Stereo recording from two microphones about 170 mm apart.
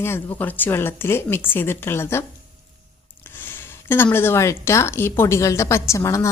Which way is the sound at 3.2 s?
10° left (ahead or behind).